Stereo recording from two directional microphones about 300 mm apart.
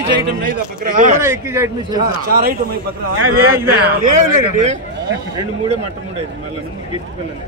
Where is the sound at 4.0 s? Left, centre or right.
Right.